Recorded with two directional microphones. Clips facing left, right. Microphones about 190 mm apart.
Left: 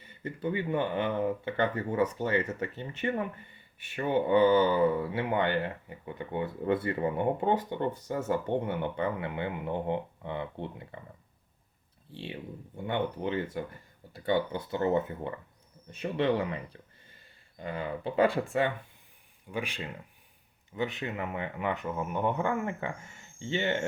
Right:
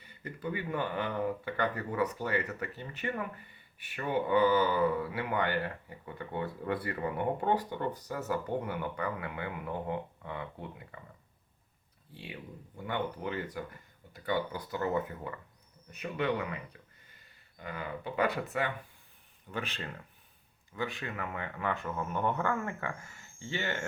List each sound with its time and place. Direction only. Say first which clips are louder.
0.2 s speech: left 5 dB; 25° left (ahead or behind)
12.1 s speech: left 5 dB; 25° left (ahead or behind)
19.5 s speech: left 3 dB; 10° left (ahead or behind)